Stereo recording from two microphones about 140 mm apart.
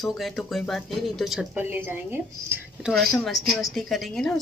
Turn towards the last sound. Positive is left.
turn(degrees=5)  # may be behind; listen again after turning